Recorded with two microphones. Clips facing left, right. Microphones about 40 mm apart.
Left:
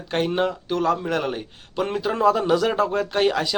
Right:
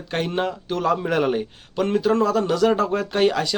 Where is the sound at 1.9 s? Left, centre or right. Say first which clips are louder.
Even; centre.